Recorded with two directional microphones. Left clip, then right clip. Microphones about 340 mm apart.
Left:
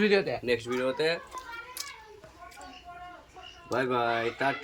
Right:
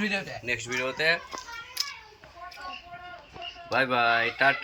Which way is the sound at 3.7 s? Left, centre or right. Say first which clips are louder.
Right 4 dB; centre.